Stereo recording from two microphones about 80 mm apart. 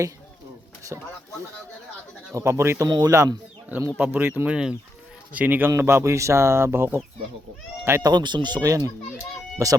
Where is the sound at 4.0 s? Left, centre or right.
Right.